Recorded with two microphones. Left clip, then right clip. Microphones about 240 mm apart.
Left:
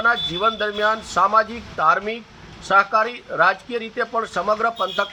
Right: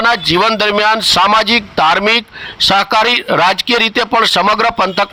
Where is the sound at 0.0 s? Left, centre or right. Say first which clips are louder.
Right 8 dB; right.